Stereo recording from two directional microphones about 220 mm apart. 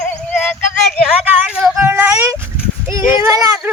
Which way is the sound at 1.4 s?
5° right (ahead or behind).